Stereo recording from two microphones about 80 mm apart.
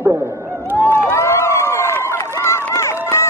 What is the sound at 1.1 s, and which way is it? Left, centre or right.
Run, left.